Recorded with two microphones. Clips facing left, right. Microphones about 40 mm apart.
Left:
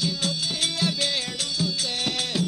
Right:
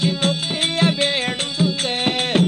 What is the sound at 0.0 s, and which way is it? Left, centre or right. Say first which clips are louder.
Music: right 7 dB; right.